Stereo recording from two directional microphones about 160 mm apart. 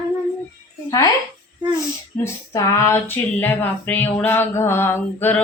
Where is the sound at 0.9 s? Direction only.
20° left (ahead or behind).